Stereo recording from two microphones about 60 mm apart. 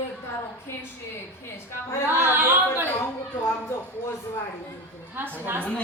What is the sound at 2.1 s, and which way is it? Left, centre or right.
Chatter, right.